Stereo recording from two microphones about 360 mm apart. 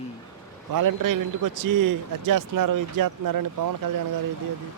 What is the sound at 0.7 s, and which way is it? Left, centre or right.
A man's voice, right.